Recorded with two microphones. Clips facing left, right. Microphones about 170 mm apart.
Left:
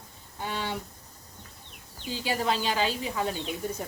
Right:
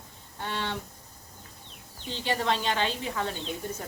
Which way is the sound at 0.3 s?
10° left (ahead or behind).